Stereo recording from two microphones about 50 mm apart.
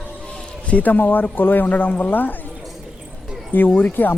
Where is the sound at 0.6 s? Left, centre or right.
Left.